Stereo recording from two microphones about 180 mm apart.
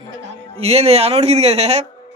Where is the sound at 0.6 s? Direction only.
35° right (ahead or behind).